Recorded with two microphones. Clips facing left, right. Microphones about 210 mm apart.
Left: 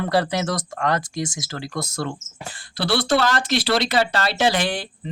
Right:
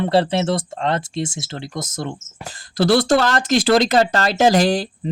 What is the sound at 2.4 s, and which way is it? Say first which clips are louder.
Speech: right 9 dB; 45° right (ahead or behind).